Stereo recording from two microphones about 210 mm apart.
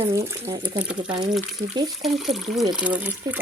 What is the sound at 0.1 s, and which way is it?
Speech, 15° right (ahead or behind).